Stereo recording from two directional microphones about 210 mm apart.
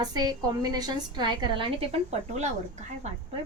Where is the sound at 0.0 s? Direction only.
20° right (ahead or behind).